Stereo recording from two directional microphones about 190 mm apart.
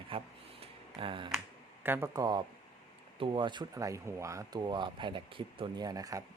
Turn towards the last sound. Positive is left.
turn(degrees=-20)  # may be behind; listen again after turning